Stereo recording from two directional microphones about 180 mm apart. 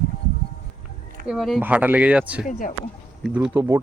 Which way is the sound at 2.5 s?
45° left (ahead or behind).